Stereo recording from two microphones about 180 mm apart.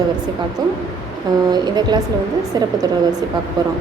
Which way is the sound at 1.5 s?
25° right (ahead or behind).